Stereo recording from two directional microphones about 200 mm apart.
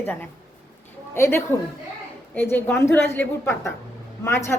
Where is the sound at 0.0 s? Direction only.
10° left (ahead or behind).